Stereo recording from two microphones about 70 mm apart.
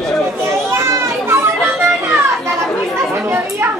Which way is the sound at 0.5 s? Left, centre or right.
Right.